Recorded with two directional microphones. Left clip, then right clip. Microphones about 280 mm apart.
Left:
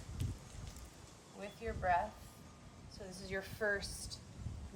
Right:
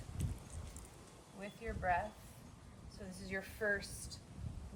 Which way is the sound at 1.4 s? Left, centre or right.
Centre.